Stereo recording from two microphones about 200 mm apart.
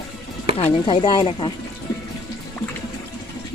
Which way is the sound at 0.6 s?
25° left (ahead or behind).